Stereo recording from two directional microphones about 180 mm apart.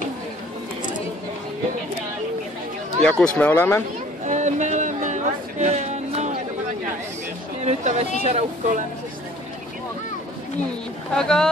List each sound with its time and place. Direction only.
3.0 s speech: 5° left (ahead or behind)
4.2 s music: 40° right (ahead or behind)
7.6 s speech: 40° right (ahead or behind)
11.1 s speech: 5° left (ahead or behind)